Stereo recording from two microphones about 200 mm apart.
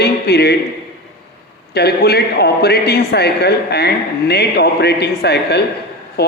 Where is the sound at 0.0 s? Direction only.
55° left (ahead or behind).